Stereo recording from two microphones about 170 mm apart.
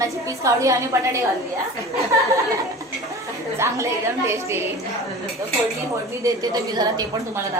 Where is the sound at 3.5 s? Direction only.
15° right (ahead or behind).